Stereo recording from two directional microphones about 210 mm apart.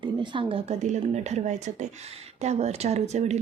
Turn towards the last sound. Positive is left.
turn(degrees=-30)  # may be behind; listen again after turning